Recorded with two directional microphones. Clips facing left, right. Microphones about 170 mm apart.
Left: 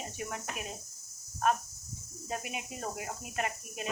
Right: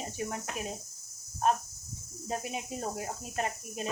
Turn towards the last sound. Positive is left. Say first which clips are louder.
# right 2 dB
turn(degrees=-35)  # may be behind; listen again after turning